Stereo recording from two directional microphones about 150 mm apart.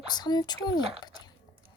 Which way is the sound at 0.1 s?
30° left (ahead or behind).